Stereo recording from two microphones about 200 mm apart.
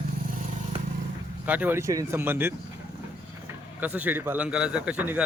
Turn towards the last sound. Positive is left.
turn(degrees=-10)  # may be behind; listen again after turning